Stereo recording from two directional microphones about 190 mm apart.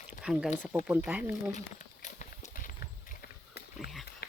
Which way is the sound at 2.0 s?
45° left (ahead or behind).